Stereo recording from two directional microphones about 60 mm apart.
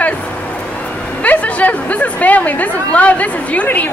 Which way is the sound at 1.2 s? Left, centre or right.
Left.